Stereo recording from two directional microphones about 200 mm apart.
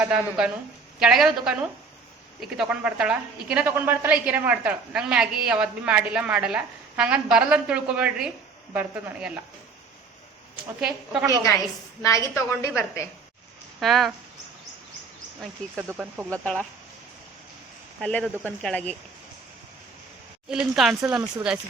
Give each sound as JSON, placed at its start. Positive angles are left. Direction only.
{"t": 0.0, "sound": "a woman's voice", "side_deg": -5}
{"t": 10.8, "sound": "a woman's voice", "side_deg": -5}
{"t": 12.0, "sound": "a woman's voice", "side_deg": 15}
{"t": 13.7, "sound": "speech", "side_deg": 0}
{"t": 15.9, "sound": "speech", "side_deg": -10}
{"t": 16.3, "sound": "a woman's voice", "side_deg": 5}
{"t": 18.0, "sound": "a woman's voice", "side_deg": 5}
{"t": 20.5, "sound": "a woman's voice", "side_deg": -5}